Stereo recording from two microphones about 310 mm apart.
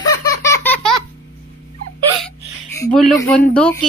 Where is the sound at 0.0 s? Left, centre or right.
Centre.